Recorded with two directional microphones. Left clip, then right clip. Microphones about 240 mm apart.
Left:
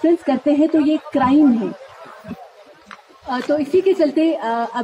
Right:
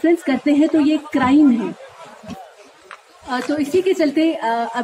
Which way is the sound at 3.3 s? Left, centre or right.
Left.